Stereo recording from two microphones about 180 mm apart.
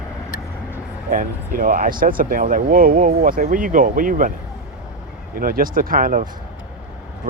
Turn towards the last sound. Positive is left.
turn(degrees=-45)  # may be behind; listen again after turning